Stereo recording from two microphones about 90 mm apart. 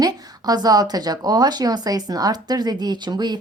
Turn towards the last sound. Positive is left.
turn(degrees=-55)  # may be behind; listen again after turning